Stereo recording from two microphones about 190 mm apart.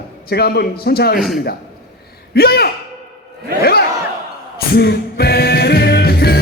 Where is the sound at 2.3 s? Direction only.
55° left (ahead or behind).